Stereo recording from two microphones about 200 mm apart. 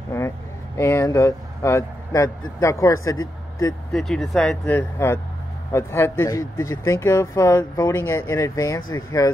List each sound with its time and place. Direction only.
0.7 s speech: 15° left (ahead or behind)
3.9 s speech: centre (ahead or behind); by 9.3 s 15° left (ahead or behind)